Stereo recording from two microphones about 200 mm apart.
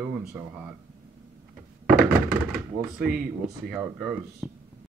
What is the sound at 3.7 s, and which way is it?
Speech, 5° right (ahead or behind).